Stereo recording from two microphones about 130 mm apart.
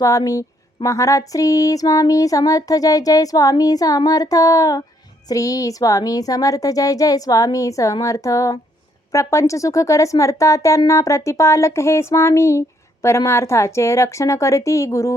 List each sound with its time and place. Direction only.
0.0 s speech: 25° left (ahead or behind)